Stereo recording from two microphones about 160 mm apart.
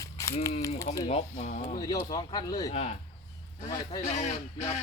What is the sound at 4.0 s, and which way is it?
Speech, 45° left (ahead or behind).